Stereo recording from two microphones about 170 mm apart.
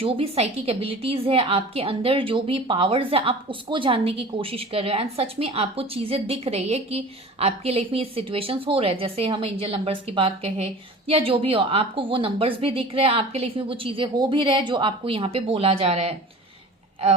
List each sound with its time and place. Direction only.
0.0 s a woman's voice: 35° right (ahead or behind)